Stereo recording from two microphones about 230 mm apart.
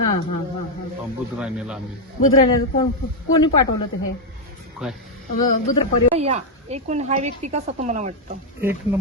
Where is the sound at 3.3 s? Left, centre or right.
Centre.